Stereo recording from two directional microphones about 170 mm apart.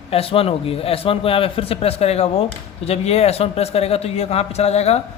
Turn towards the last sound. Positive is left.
turn(degrees=40)  # may be behind; listen again after turning